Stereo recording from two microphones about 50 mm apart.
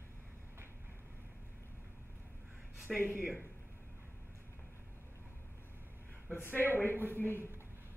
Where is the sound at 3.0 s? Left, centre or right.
Right.